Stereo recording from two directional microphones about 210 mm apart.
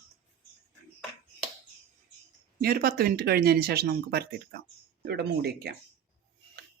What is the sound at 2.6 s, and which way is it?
Speech, 45° right (ahead or behind).